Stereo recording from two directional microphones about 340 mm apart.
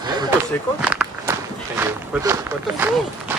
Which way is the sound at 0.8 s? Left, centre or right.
Centre.